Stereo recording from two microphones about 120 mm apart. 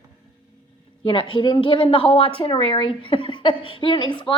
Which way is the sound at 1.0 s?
45° left (ahead or behind).